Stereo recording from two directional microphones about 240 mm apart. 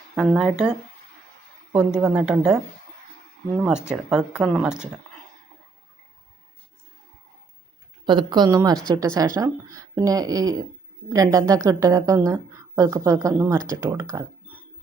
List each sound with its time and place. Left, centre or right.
0.2 s speech: centre
2.0 s speech: centre
3.6 s speech: centre
8.0 s a woman's voice: centre